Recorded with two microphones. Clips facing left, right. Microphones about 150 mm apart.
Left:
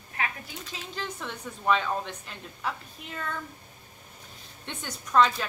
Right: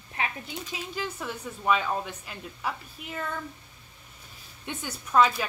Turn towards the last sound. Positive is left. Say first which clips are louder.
# even
turn(degrees=-10)  # may be behind; listen again after turning